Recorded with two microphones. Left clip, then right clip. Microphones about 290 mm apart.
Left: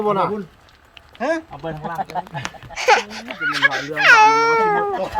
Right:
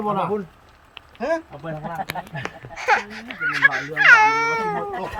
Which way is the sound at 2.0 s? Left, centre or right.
Left.